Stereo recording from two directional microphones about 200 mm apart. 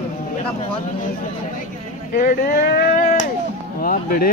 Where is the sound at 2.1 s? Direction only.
45° left (ahead or behind).